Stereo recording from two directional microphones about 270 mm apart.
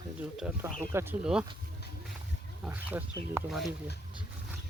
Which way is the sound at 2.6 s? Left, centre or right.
Centre.